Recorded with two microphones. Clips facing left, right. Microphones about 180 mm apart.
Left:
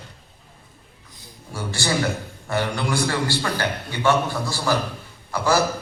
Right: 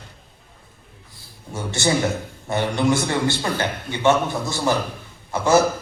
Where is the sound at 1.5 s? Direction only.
20° right (ahead or behind).